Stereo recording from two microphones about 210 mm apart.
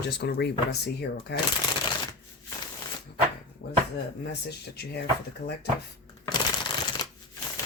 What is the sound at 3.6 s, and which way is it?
Speech, 45° left (ahead or behind).